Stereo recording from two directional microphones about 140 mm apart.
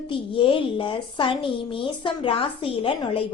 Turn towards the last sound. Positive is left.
turn(degrees=40)  # may be behind; listen again after turning